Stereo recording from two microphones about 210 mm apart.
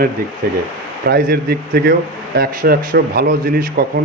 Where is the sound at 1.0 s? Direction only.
45° right (ahead or behind).